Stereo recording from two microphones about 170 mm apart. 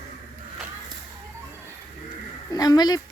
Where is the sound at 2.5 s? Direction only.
25° left (ahead or behind).